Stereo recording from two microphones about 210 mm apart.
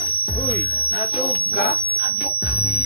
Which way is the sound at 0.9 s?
45° left (ahead or behind).